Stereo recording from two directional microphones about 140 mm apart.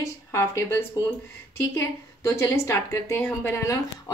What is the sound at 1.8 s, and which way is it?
A woman's voice, 20° left (ahead or behind).